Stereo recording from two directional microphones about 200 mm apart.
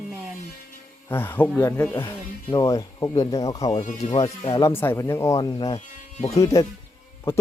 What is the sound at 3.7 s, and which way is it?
Speech, 35° left (ahead or behind).